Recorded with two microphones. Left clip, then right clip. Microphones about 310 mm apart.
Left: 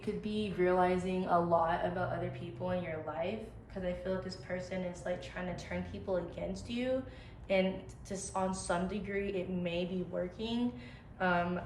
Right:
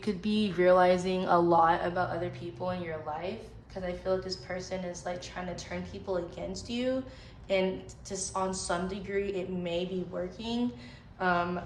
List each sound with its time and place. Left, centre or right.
0.0 s speech: right
2.6 s a woman's voice: centre